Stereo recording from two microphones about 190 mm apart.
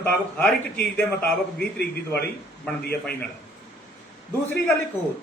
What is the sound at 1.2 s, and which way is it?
A man's voice, 55° left (ahead or behind).